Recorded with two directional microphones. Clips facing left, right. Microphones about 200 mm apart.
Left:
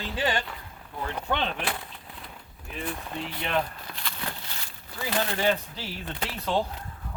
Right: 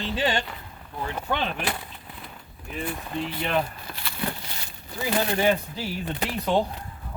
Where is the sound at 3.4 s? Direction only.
5° right (ahead or behind).